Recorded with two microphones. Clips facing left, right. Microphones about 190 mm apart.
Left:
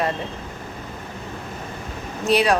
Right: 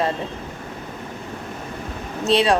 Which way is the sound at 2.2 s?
25° right (ahead or behind).